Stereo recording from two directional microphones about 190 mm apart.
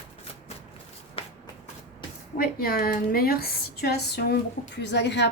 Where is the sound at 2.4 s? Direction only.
50° left (ahead or behind).